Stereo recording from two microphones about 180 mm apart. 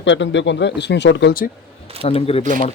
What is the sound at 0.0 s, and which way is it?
Speech, 85° left.